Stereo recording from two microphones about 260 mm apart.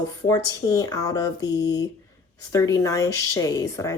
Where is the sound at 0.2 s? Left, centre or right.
Centre.